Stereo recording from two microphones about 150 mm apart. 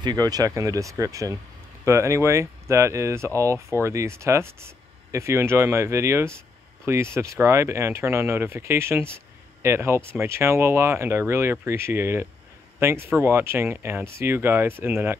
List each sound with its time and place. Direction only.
0.0 s speech: 25° right (ahead or behind)